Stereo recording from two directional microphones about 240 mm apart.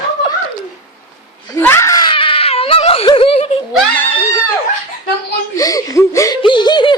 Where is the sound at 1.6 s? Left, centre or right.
Centre.